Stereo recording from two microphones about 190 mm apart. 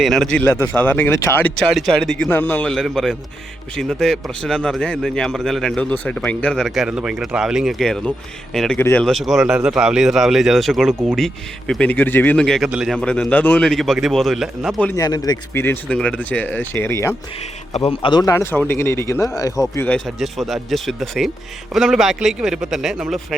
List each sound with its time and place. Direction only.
0.0 s a man's voice: centre (ahead or behind)
14.8 s speech: 20° left (ahead or behind)
17.7 s a man's voice: 30° left (ahead or behind); by 23.2 s centre (ahead or behind)